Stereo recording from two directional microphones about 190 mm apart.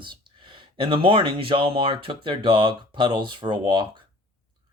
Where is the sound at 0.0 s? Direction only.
25° right (ahead or behind).